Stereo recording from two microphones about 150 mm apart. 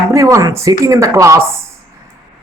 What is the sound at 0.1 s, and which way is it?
Speech, 20° right (ahead or behind).